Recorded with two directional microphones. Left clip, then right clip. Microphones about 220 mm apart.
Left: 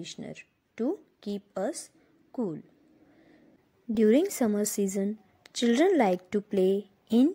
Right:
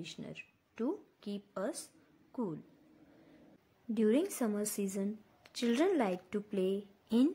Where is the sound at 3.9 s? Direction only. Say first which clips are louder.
Left 8 dB; 25° left (ahead or behind).